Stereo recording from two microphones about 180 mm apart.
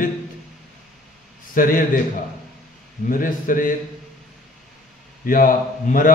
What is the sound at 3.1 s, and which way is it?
Speech, 50° left (ahead or behind).